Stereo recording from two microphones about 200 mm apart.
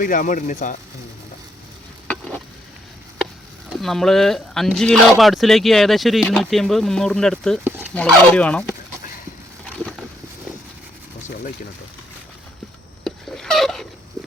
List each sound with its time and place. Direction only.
0.0 s speech: 40° left (ahead or behind)
2.0 s sizzle: 5° left (ahead or behind)
3.7 s speech: centre (ahead or behind)
13.1 s a sound: centre (ahead or behind)